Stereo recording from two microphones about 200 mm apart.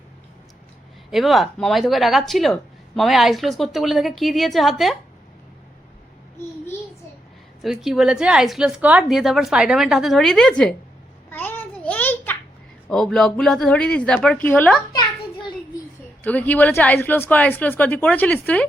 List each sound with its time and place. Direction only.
1.1 s speech: centre (ahead or behind)
7.6 s speech: centre (ahead or behind)
11.3 s a sound: 10° left (ahead or behind)
12.9 s a woman's voice: centre (ahead or behind)
16.2 s a woman's voice: 10° left (ahead or behind)